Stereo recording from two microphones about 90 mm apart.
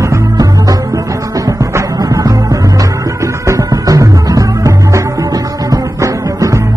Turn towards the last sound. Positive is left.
turn(degrees=-35)  # may be behind; listen again after turning